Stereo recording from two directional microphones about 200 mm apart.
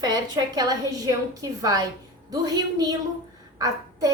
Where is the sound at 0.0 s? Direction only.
20° right (ahead or behind).